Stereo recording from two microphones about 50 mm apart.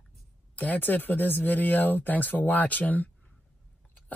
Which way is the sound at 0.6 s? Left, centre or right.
Left.